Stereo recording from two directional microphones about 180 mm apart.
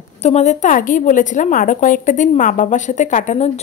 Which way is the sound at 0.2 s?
35° left (ahead or behind).